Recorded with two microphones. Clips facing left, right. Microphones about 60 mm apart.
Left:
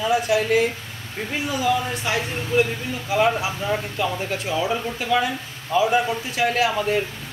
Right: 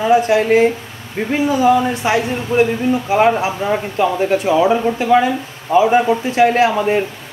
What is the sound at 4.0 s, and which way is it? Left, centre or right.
Speech, right.